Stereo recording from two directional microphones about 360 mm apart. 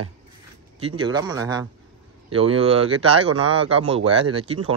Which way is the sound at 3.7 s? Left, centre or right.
Centre.